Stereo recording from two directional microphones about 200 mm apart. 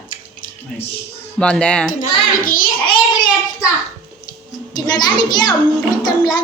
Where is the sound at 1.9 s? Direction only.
45° left (ahead or behind).